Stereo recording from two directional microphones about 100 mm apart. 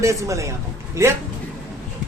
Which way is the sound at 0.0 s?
30° right (ahead or behind).